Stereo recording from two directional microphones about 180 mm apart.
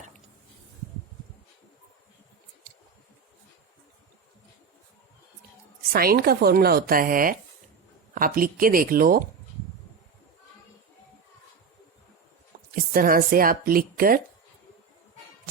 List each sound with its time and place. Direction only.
5.9 s speech: 55° right (ahead or behind)
12.7 s speech: 50° right (ahead or behind)